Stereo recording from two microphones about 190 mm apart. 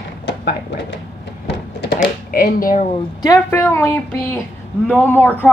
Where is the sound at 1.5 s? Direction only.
60° left (ahead or behind).